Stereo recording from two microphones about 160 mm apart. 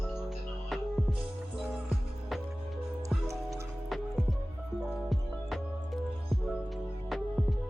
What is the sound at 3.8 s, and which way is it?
Music, centre (ahead or behind).